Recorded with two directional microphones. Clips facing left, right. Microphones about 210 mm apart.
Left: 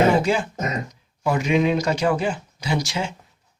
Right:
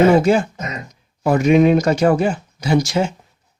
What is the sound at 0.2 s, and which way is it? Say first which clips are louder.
Speech: right 6 dB; 45° right (ahead or behind).